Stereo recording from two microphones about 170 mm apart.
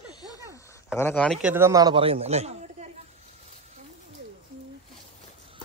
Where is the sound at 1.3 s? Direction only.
10° right (ahead or behind); by 2.8 s 40° right (ahead or behind).